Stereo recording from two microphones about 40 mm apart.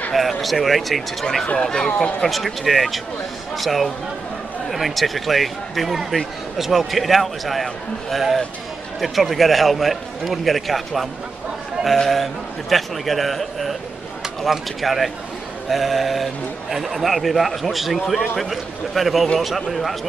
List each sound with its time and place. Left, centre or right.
0.1 s a man's voice: centre
1.2 s speech: centre
2.2 s a man's voice: centre